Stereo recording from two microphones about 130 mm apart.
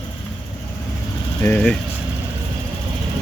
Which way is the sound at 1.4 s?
15° left (ahead or behind).